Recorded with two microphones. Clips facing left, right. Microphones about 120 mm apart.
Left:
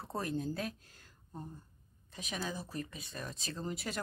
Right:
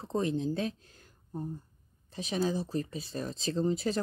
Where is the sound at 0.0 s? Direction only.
20° right (ahead or behind).